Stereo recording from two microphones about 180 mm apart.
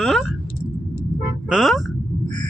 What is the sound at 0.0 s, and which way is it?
Speech, centre (ahead or behind).